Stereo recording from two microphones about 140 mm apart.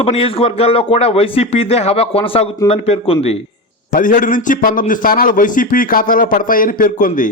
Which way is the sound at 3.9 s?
75° left (ahead or behind).